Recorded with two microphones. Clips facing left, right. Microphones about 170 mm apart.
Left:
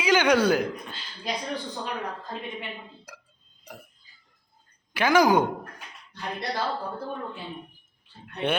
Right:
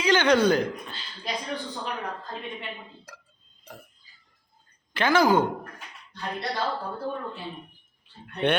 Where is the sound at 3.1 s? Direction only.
10° left (ahead or behind).